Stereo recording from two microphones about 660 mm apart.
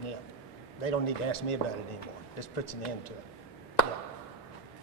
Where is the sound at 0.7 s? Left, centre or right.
Left.